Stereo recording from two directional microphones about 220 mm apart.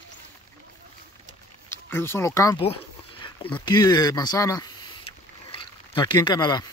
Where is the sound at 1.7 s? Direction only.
10° left (ahead or behind).